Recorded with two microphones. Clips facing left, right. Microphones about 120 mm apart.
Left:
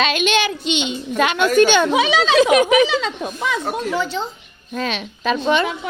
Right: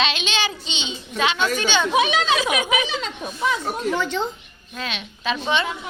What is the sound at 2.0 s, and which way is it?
Speech, 90° left.